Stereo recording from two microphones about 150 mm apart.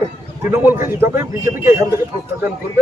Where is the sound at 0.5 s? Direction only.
15° right (ahead or behind).